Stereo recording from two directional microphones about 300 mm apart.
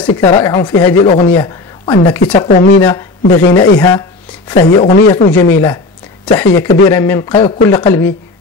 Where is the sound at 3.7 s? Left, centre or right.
Centre.